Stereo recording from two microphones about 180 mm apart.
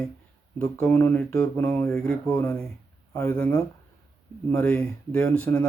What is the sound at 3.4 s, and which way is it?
Speech, 5° left (ahead or behind).